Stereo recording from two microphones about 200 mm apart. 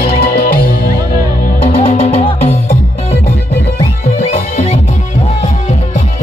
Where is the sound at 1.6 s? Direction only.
30° left (ahead or behind).